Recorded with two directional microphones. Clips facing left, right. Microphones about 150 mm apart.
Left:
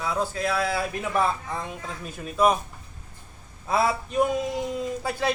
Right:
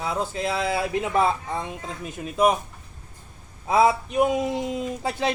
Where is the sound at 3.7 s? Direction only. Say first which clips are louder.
Right 5 dB; 15° right (ahead or behind).